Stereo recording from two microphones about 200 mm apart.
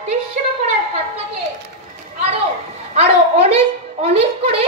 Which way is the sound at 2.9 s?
30° right (ahead or behind).